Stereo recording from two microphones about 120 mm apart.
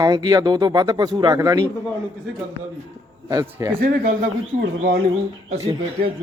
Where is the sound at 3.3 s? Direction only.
25° right (ahead or behind).